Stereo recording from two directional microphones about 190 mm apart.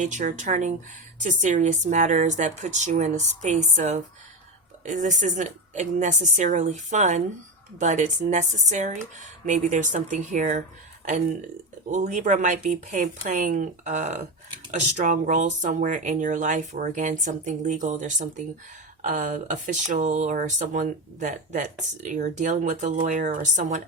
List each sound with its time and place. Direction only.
0.0 s speech: 40° right (ahead or behind)
11.9 s speech: 40° right (ahead or behind)